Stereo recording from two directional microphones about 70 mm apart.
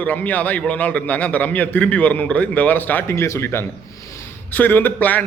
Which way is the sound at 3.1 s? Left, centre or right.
Left.